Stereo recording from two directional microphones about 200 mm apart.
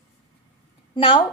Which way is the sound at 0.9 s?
25° left (ahead or behind).